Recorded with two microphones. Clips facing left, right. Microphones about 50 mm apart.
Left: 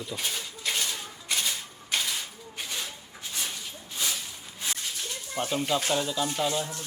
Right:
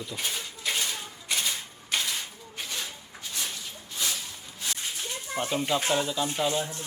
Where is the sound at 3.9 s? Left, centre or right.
Centre.